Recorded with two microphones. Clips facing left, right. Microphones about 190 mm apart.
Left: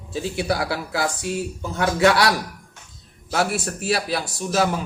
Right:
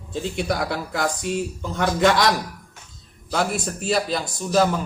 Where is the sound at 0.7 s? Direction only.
5° left (ahead or behind).